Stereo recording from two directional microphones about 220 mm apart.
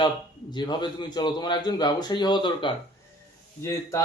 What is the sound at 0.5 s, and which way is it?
Speech, 20° left (ahead or behind).